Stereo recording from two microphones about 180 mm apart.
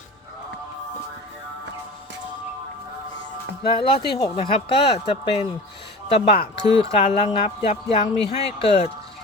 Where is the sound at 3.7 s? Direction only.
30° left (ahead or behind).